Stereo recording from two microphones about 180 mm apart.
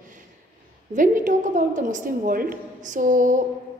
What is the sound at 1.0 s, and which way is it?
A woman's voice, 45° right (ahead or behind).